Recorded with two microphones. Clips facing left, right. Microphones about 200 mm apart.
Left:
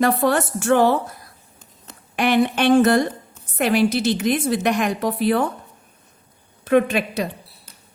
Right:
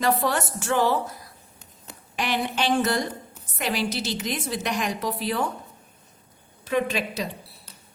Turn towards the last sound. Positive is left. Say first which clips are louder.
# left 6 dB
turn(degrees=60)  # may be behind; listen again after turning